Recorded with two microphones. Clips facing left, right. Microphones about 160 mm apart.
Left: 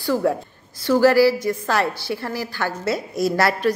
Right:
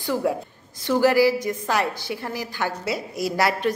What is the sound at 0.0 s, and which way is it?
A woman's voice, 15° right (ahead or behind).